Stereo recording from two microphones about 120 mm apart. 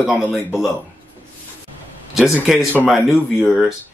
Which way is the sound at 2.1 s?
5° right (ahead or behind).